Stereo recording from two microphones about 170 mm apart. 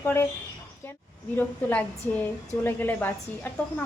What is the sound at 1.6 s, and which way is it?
A woman's voice, 10° left (ahead or behind).